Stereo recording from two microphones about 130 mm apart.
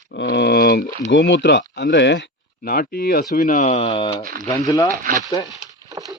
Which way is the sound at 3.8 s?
45° left (ahead or behind).